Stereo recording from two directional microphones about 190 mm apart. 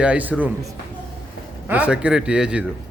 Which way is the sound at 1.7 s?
5° right (ahead or behind).